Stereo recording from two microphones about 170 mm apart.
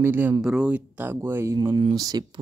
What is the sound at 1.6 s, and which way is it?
Speech, 30° right (ahead or behind).